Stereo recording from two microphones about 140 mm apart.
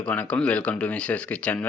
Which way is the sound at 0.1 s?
10° left (ahead or behind).